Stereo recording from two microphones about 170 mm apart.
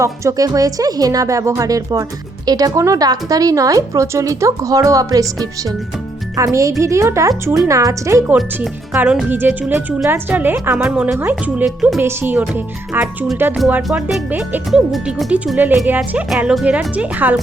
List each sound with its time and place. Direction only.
0.0 s a woman's voice: 20° right (ahead or behind)